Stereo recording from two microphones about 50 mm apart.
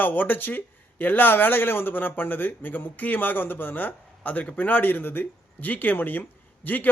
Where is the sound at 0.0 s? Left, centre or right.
Left.